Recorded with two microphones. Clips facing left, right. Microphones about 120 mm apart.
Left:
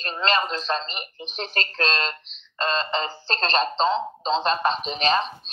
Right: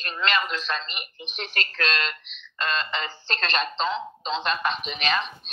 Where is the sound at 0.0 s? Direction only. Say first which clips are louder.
Left 3 dB; 35° left (ahead or behind).